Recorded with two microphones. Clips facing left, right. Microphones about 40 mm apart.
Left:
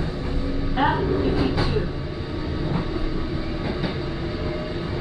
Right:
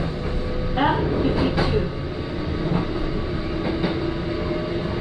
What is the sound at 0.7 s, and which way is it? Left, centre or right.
Vehicle, centre.